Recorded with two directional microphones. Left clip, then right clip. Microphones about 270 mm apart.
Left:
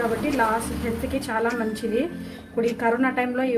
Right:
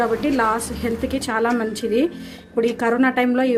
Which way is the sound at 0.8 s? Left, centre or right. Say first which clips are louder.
Right 4 dB; right.